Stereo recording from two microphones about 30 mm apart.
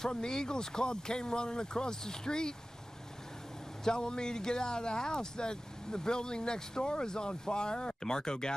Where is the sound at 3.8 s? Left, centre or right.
Left.